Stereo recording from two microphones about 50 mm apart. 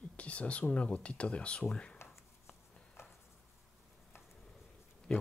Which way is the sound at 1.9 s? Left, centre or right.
Left.